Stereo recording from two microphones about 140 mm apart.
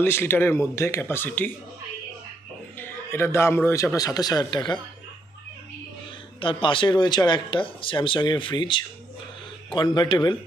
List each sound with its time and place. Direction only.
0.0 s speech: 15° left (ahead or behind)
2.8 s speech: 15° left (ahead or behind); by 4.8 s 35° left (ahead or behind)
6.4 s speech: 35° left (ahead or behind)